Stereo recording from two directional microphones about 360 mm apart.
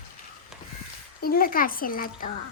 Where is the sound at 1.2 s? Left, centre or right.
Left.